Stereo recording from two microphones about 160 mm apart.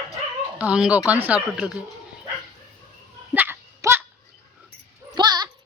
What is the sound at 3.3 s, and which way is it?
Dog, 15° right (ahead or behind).